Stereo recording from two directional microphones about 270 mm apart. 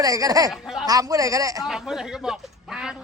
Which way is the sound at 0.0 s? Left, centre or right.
Centre.